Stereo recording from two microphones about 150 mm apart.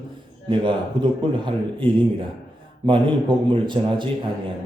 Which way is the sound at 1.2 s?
35° right (ahead or behind).